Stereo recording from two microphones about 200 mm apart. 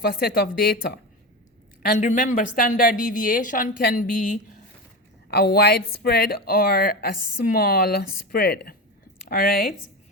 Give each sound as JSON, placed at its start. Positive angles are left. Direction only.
{"t": 0.0, "sound": "speech", "side_deg": 50}
{"t": 1.8, "sound": "a woman's voice", "side_deg": 40}